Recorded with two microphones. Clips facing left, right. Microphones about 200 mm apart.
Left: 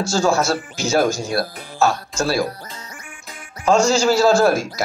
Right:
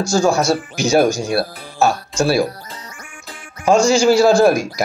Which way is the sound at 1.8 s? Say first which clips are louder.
Right 3 dB; 30° right (ahead or behind).